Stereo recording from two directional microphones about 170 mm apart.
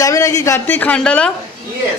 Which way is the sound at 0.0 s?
20° left (ahead or behind).